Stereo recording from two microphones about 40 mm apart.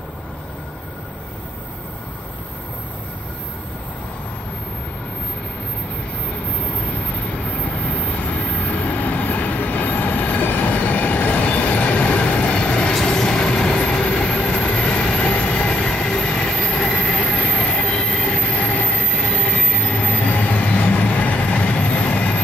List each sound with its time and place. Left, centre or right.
7.5 s vehicle: left
13.0 s vehicle: centre
15.7 s train: centre
18.6 s train: left
19.1 s train: left
20.0 s train: left